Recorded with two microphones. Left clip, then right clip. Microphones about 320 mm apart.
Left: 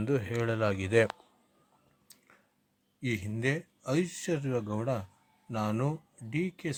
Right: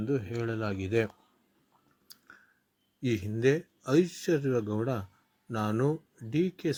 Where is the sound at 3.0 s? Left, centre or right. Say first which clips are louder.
Right 5 dB; centre.